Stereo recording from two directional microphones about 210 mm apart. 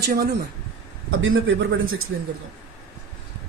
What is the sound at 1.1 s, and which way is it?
Speech, 70° right (ahead or behind).